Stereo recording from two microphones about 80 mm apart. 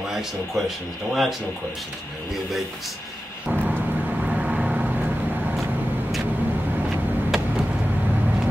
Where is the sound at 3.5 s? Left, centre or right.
Right.